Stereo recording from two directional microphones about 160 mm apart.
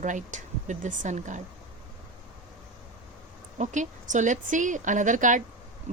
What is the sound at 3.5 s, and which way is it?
A woman's voice, 50° right (ahead or behind).